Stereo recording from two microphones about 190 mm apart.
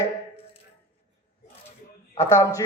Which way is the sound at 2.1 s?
15° left (ahead or behind).